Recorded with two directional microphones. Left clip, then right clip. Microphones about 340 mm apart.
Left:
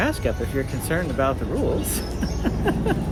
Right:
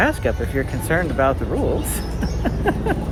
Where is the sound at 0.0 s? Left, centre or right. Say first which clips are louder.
Right 4 dB; centre.